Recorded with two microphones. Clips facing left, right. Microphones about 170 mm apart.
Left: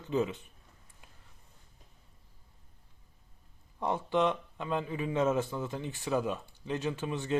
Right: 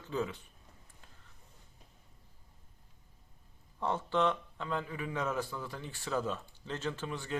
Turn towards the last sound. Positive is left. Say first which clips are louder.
# left 5 dB
turn(degrees=20)  # may be behind; listen again after turning